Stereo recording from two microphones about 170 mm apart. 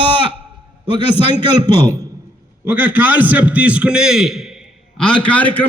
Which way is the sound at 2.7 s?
10° right (ahead or behind).